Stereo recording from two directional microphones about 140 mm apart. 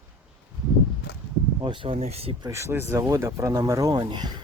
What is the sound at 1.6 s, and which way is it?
Speech, 35° right (ahead or behind).